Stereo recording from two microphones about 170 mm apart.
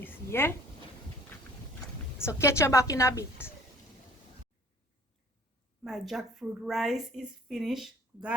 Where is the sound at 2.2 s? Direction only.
15° left (ahead or behind).